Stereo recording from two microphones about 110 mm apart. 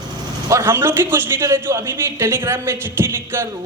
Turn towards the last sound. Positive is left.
turn(degrees=-20)  # may be behind; listen again after turning